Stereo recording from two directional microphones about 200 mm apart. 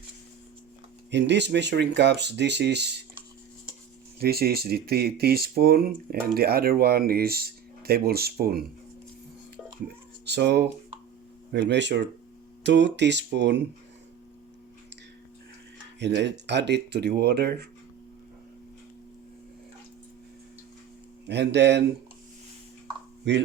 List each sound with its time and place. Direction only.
1.1 s speech: 60° right (ahead or behind)
4.2 s speech: 50° right (ahead or behind)
10.2 s speech: 55° right (ahead or behind)
16.0 s speech: 60° right (ahead or behind)
21.2 s speech: 55° right (ahead or behind)